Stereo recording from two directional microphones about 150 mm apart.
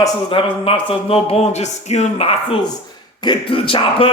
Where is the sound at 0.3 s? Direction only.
35° left (ahead or behind).